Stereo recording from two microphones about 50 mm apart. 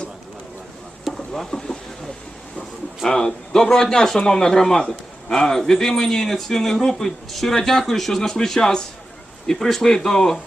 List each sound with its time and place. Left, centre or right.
1.1 s speech: centre
3.0 s a man's voice: centre